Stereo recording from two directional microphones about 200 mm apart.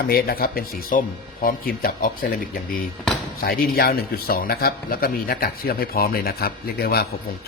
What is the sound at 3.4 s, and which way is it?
A man's voice, 45° left (ahead or behind).